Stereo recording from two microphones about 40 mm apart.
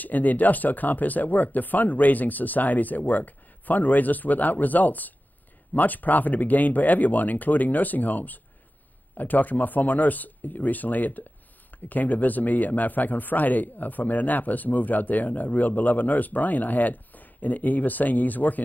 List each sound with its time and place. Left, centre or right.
0.0 s a man's voice: left